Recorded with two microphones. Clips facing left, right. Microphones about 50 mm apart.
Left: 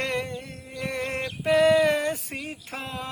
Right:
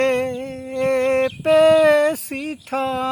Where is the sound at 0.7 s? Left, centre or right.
Right.